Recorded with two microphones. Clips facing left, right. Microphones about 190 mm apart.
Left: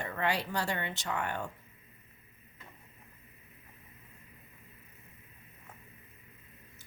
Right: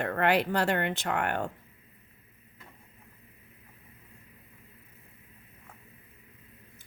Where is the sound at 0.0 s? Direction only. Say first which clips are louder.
Right 7 dB; 60° right (ahead or behind).